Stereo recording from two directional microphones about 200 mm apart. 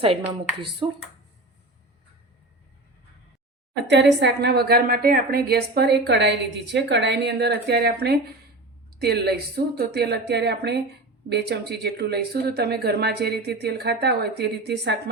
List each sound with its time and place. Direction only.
3.8 s a woman's voice: 60° right (ahead or behind)